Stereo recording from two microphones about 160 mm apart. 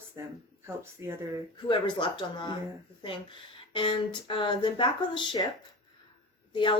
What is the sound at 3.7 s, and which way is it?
Speech, 30° left (ahead or behind).